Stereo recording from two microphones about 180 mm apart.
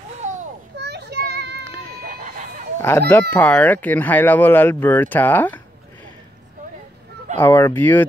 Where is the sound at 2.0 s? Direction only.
50° right (ahead or behind).